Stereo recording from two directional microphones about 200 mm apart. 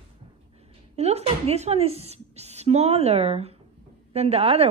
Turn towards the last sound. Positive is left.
turn(degrees=-30)  # may be behind; listen again after turning